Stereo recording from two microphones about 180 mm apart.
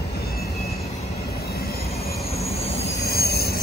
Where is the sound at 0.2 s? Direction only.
60° left (ahead or behind).